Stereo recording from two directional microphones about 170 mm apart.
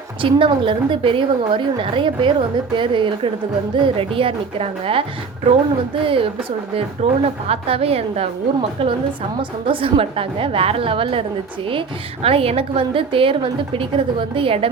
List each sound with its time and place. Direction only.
0.2 s a woman's voice: 30° right (ahead or behind)
6.1 s a woman's voice: 30° right (ahead or behind)
9.4 s a woman's voice: 30° right (ahead or behind)